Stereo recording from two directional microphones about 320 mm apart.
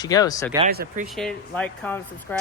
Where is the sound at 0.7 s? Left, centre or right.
Right.